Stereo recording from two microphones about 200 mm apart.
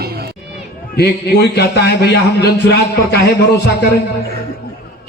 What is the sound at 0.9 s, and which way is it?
A man's voice, 55° left (ahead or behind).